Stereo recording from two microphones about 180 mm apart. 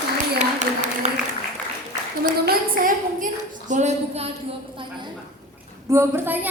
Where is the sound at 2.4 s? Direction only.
50° right (ahead or behind).